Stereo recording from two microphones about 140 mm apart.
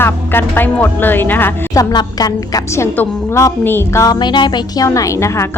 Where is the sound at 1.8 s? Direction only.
25° left (ahead or behind).